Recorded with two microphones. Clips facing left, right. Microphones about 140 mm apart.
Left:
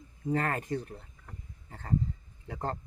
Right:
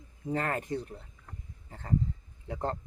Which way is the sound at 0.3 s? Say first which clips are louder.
Left 1 dB; 25° right (ahead or behind).